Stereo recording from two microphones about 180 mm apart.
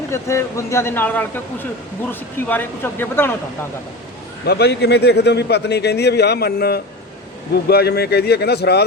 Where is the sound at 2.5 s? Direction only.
10° left (ahead or behind).